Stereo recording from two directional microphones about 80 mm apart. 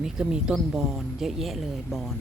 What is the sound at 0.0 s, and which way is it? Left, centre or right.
Speech, centre.